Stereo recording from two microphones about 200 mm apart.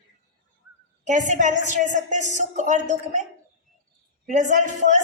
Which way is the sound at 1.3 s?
40° right (ahead or behind).